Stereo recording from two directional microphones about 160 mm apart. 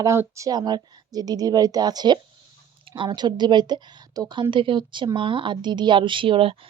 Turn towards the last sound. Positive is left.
turn(degrees=-35)  # may be behind; listen again after turning